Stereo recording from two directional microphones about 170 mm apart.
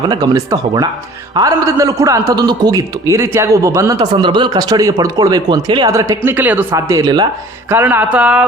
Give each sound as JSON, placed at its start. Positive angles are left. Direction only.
{"t": 0.1, "sound": "a man's voice", "side_deg": -25}
{"t": 7.7, "sound": "speech", "side_deg": -10}